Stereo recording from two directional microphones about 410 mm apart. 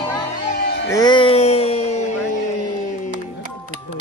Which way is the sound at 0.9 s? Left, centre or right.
Centre.